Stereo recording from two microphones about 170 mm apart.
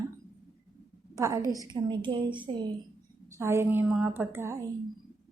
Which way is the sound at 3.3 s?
15° right (ahead or behind).